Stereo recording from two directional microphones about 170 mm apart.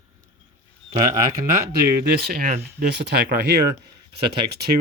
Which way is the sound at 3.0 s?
75° right (ahead or behind).